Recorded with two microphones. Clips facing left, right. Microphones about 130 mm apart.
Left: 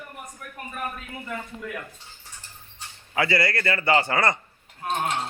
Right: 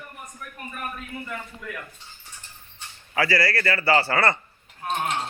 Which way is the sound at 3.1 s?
20° left (ahead or behind).